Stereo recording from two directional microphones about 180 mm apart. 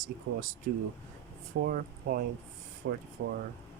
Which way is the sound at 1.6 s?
55° right (ahead or behind).